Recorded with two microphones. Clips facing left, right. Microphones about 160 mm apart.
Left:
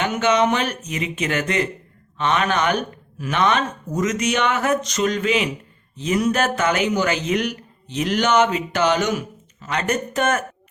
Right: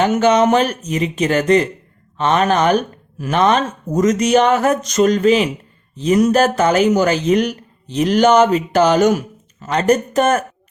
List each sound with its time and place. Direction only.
0.0 s a man's voice: 40° right (ahead or behind)